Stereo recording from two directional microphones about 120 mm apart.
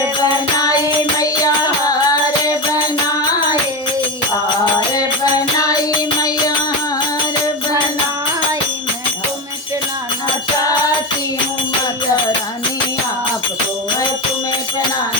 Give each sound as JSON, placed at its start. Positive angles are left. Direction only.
{"t": 1.9, "sound": "music", "side_deg": 30}